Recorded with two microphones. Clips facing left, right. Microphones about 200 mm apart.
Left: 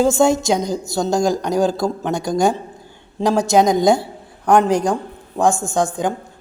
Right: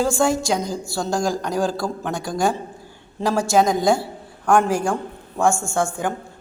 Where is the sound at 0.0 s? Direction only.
20° left (ahead or behind).